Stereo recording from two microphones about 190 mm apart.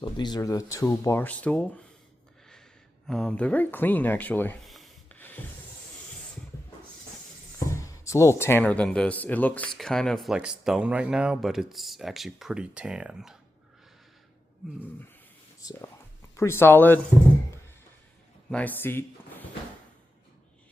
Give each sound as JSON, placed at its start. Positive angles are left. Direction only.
{"t": 0.0, "sound": "speech", "side_deg": 20}
{"t": 3.1, "sound": "speech", "side_deg": 5}
{"t": 4.7, "sound": "a sound", "side_deg": 5}
{"t": 7.7, "sound": "speech", "side_deg": 15}
{"t": 15.6, "sound": "speech", "side_deg": 20}
{"t": 18.5, "sound": "speech", "side_deg": 10}